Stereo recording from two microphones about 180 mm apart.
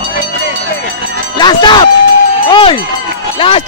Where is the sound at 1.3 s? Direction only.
25° left (ahead or behind).